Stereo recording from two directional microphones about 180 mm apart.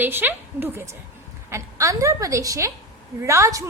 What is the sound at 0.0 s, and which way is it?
A woman's voice, 10° right (ahead or behind).